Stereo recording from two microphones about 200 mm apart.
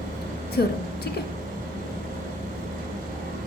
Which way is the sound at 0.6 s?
50° left (ahead or behind).